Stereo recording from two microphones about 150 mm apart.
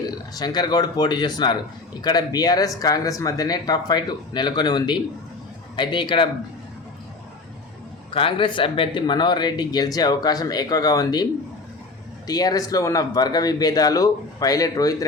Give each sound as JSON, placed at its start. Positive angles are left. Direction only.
{"t": 0.3, "sound": "a man's voice", "side_deg": 30}
{"t": 8.1, "sound": "a man's voice", "side_deg": 35}
{"t": 12.3, "sound": "a man's voice", "side_deg": 25}